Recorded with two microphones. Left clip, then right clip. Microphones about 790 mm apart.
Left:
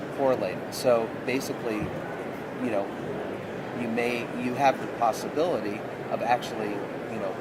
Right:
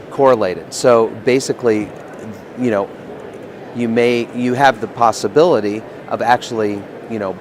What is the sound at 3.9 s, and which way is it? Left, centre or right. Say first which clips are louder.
A man's voice: right 14 dB; right.